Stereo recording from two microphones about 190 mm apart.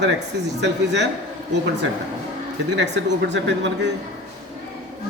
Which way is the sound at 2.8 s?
65° right (ahead or behind).